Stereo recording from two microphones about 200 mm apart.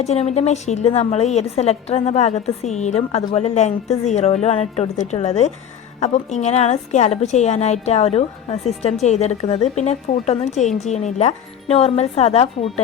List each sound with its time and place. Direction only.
0.0 s a woman's voice: 30° left (ahead or behind)